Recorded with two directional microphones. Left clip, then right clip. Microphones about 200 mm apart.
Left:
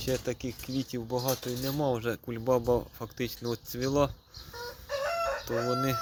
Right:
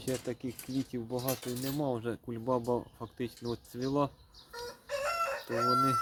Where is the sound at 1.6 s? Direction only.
Centre (ahead or behind).